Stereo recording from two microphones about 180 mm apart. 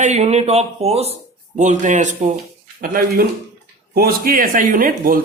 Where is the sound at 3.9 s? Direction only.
55° right (ahead or behind).